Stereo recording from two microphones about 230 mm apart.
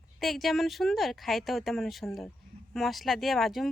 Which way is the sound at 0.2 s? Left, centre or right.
Centre.